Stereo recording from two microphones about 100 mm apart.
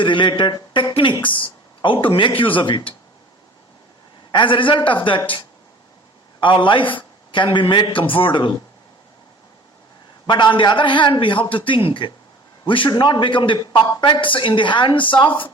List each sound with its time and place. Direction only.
0.0 s speech: 55° left (ahead or behind)
4.3 s speech: 55° left (ahead or behind)
6.4 s speech: 55° left (ahead or behind)
10.2 s speech: 50° left (ahead or behind)